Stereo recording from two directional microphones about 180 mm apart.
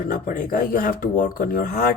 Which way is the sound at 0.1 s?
45° left (ahead or behind).